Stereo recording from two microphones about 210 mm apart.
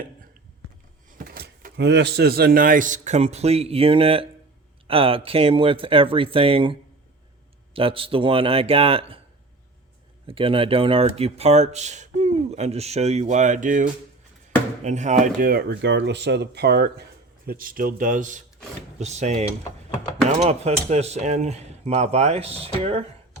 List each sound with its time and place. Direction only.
1.2 s speech: 45° right (ahead or behind); by 9.2 s 25° right (ahead or behind)
10.2 s speech: 25° right (ahead or behind)